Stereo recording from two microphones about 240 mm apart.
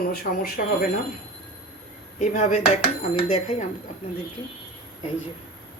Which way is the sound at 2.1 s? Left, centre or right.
Left.